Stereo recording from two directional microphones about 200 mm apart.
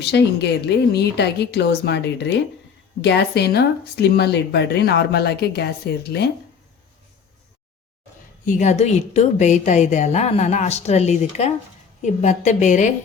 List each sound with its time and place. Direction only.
0.0 s a woman's voice: 55° left (ahead or behind)
8.4 s a woman's voice: 35° left (ahead or behind)